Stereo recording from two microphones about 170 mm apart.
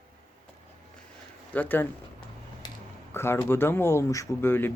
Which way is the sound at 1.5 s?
10° left (ahead or behind).